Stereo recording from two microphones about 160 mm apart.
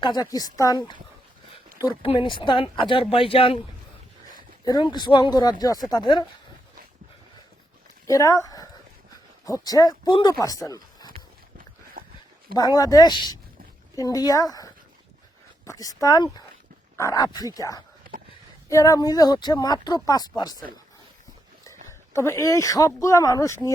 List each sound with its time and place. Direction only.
0.0 s speech: 25° left (ahead or behind)
2.0 s speech: 30° left (ahead or behind)
4.6 s speech: 25° left (ahead or behind)
8.0 s speech: 20° left (ahead or behind)
11.1 s a sound: 65° right (ahead or behind)
12.5 s speech: 25° left (ahead or behind)
22.1 s speech: 20° left (ahead or behind)